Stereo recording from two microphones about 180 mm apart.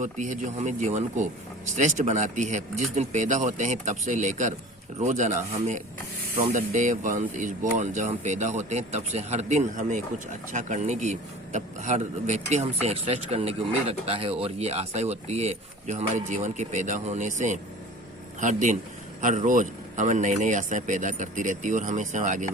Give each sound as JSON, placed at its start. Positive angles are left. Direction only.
{"t": 0.0, "sound": "speech", "side_deg": -45}